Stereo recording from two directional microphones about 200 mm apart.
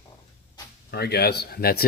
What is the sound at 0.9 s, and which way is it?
Speech, 55° left (ahead or behind).